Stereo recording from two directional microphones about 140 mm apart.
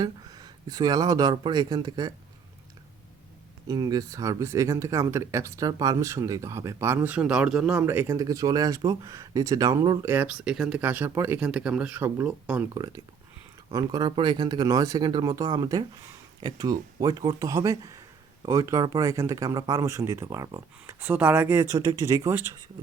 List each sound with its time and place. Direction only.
0.0 s speech: 30° right (ahead or behind)
3.7 s speech: 30° right (ahead or behind); by 7.8 s 5° right (ahead or behind)
7.8 s speech: 20° right (ahead or behind)
10.1 s speech: 10° right (ahead or behind)
12.7 s speech: 30° right (ahead or behind)